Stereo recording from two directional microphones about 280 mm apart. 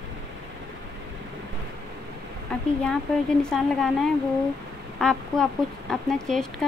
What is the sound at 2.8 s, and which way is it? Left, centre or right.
Speech, centre.